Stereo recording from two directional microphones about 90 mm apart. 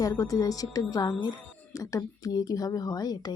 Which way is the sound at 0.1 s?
35° left (ahead or behind).